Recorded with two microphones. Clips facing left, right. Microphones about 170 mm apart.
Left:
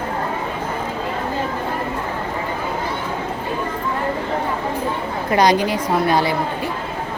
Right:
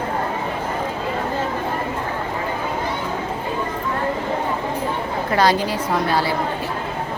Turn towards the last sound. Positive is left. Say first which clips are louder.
# left 3 dB
turn(degrees=15)  # may be behind; listen again after turning